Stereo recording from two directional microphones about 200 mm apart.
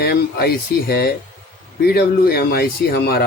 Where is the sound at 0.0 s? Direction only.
50° left (ahead or behind).